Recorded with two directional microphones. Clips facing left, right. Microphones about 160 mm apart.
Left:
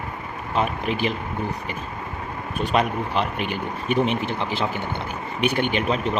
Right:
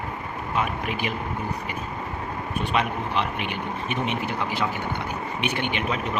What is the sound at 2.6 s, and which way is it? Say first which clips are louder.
Speech: left 4 dB; 40° left (ahead or behind).